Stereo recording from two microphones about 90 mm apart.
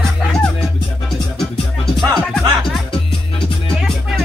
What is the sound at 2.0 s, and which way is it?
Music, centre (ahead or behind).